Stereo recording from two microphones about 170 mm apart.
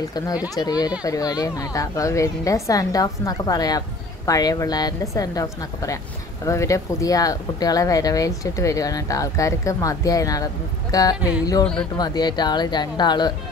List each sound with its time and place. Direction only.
0.6 s speech: 25° left (ahead or behind)
11.1 s music: 5° right (ahead or behind)
11.6 s speech: 5° left (ahead or behind)
12.0 s speech: 25° left (ahead or behind)